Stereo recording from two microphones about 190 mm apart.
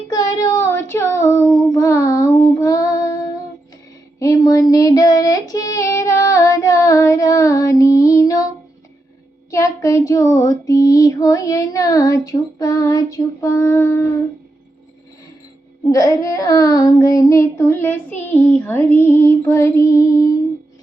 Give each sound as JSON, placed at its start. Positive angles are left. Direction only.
{"t": 0.1, "sound": "child singing", "side_deg": 20}
{"t": 4.2, "sound": "female singing", "side_deg": 15}
{"t": 9.5, "sound": "child singing", "side_deg": 15}
{"t": 15.9, "sound": "child singing", "side_deg": 15}